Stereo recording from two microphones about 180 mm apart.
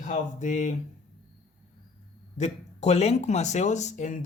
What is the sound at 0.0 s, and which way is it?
Speech, 45° left (ahead or behind).